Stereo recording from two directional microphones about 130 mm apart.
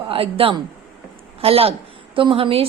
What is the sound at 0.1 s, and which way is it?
A woman's voice, 45° right (ahead or behind).